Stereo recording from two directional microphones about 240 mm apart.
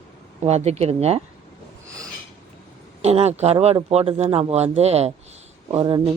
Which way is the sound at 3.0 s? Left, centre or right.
Right.